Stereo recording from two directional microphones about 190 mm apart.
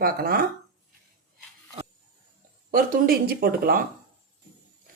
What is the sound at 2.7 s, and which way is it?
A woman's voice, 50° right (ahead or behind).